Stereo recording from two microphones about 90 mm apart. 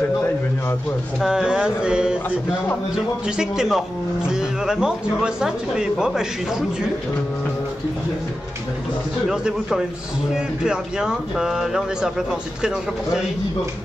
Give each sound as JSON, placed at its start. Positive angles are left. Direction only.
{"t": 1.2, "sound": "speech", "side_deg": -5}
{"t": 3.3, "sound": "speech", "side_deg": -5}
{"t": 9.3, "sound": "speech", "side_deg": -5}